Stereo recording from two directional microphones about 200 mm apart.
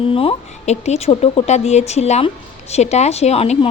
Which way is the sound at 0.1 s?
30° left (ahead or behind).